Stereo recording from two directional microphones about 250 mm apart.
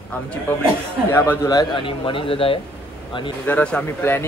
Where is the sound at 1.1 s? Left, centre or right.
Centre.